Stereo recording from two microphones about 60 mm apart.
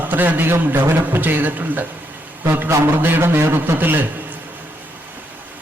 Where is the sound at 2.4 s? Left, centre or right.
Right.